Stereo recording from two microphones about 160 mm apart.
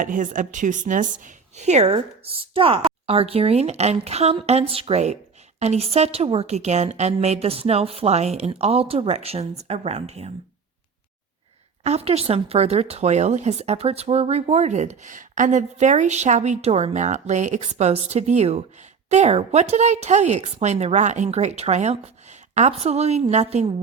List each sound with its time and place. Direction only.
0.0 s a woman's voice: 55° right (ahead or behind)
11.8 s a woman's voice: 40° right (ahead or behind)